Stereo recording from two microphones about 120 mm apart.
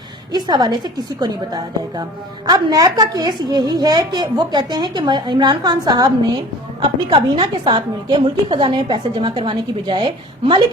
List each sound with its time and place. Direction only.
0.3 s a woman's voice: 35° right (ahead or behind)